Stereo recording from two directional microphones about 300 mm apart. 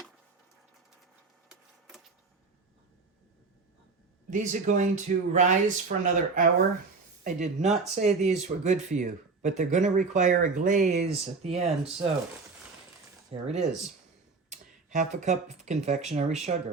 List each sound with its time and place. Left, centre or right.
4.3 s speech: right
13.3 s speech: right